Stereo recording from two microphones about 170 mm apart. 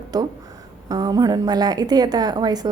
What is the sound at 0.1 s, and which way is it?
A woman's voice, 25° right (ahead or behind).